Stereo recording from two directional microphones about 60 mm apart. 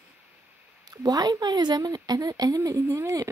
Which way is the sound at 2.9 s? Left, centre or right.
Right.